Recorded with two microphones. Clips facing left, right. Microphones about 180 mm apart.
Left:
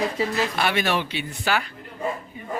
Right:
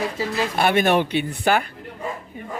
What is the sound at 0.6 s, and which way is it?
Speech, 50° right (ahead or behind).